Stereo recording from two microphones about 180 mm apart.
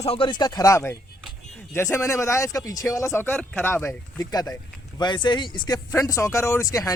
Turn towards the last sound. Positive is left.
turn(degrees=20)  # may be behind; listen again after turning